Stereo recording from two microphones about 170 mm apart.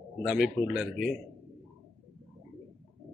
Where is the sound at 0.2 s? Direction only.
Centre (ahead or behind).